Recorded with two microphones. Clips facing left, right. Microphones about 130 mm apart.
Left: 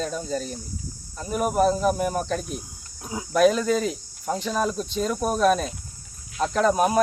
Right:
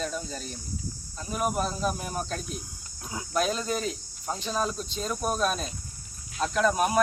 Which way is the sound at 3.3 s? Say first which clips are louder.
Left 9 dB; 75° left (ahead or behind).